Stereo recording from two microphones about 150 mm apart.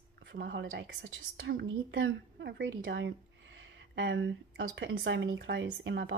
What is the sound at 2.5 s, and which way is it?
Speech, 90° right.